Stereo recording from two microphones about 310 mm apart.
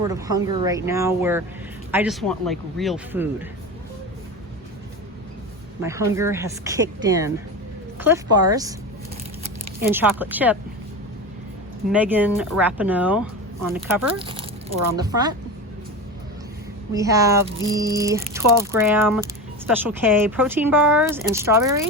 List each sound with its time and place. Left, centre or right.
0.1 s speech: centre
5.8 s speech: centre
9.9 s speech: centre
11.9 s speech: centre
14.2 s speech: centre
16.9 s speech: centre